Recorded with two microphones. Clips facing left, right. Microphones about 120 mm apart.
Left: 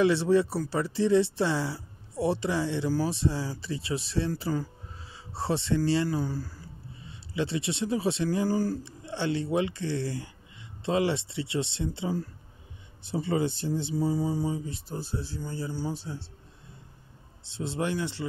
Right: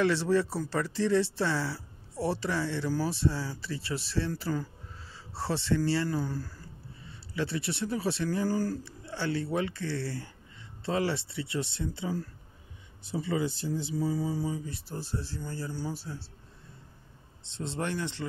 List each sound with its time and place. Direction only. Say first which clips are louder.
0.0 s speech: left 3 dB; 15° left (ahead or behind)
6.0 s speech: left 2 dB; 10° left (ahead or behind)
7.1 s speech: left 3 dB; 20° left (ahead or behind)
13.1 s speech: left 3 dB; 30° left (ahead or behind); by 15.9 s 15° left (ahead or behind)
17.4 s speech: left 3 dB; 10° left (ahead or behind)